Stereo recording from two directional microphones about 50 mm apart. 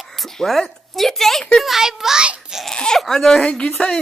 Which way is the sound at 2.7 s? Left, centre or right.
Centre.